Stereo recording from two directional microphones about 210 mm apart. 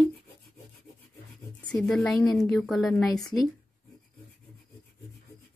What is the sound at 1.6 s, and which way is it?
A woman's voice, 5° left (ahead or behind).